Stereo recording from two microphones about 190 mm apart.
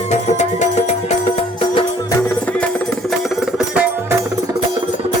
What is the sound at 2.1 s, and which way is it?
Music, 10° left (ahead or behind).